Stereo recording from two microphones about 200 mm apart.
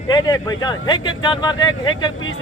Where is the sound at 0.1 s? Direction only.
20° left (ahead or behind).